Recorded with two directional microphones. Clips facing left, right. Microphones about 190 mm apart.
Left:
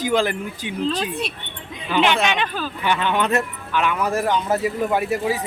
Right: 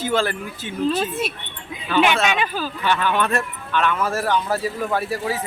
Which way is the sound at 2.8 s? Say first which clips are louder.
Even; 20° left (ahead or behind).